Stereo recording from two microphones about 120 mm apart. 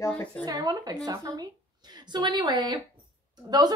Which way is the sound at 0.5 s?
35° right (ahead or behind).